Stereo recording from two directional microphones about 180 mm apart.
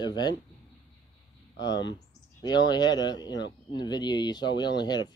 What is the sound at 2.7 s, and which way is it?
Speech, 20° left (ahead or behind).